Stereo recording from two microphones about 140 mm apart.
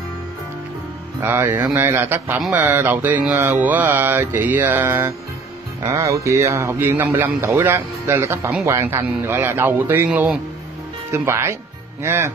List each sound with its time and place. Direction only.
1.2 s a man's voice: 15° right (ahead or behind)
11.1 s a man's voice: 20° right (ahead or behind)